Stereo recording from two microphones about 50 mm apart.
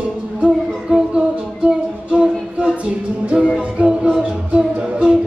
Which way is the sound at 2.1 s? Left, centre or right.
Centre.